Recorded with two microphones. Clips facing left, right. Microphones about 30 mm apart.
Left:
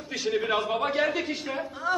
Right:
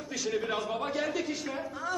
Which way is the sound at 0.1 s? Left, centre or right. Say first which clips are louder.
Left 5 dB; left.